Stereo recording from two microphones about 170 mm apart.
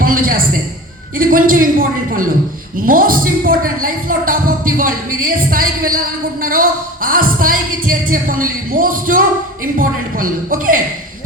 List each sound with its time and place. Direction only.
0.0 s a sound: 55° right (ahead or behind)
1.2 s speech: 55° right (ahead or behind)
2.8 s speech: 55° right (ahead or behind)